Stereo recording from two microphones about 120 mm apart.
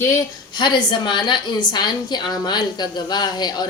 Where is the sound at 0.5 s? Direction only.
40° left (ahead or behind).